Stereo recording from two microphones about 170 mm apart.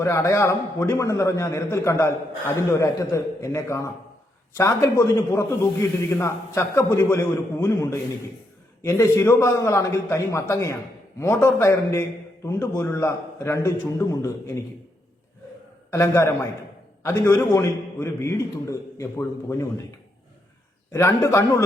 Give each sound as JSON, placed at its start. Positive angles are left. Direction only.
{"t": 0.0, "sound": "a man's voice", "side_deg": 15}
{"t": 15.9, "sound": "a man's voice", "side_deg": 15}
{"t": 20.9, "sound": "a man's voice", "side_deg": 15}